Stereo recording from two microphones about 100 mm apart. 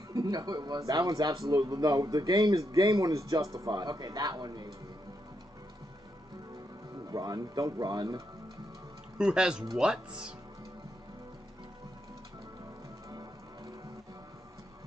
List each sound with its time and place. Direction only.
0.1 s a man's voice: 40° right (ahead or behind)
7.1 s speech: 40° right (ahead or behind)
9.2 s speech: 10° right (ahead or behind)